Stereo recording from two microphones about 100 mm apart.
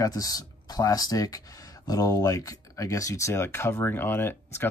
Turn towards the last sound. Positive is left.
turn(degrees=20)  # may be behind; listen again after turning